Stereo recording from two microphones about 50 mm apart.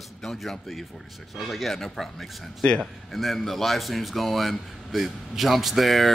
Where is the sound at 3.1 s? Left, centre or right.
Centre.